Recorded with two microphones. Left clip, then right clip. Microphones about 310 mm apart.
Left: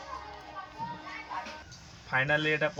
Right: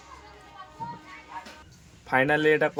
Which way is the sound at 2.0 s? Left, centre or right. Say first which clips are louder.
Right 6 dB; centre.